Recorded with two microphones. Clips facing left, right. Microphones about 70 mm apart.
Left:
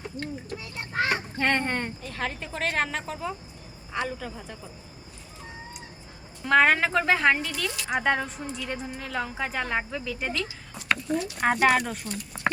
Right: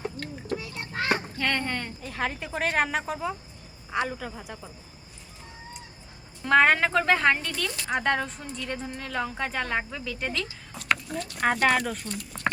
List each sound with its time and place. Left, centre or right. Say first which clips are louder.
1.4 s speech: left 3 dB; left
2.0 s a woman's voice: right 2 dB; centre
6.4 s a woman's voice: even; centre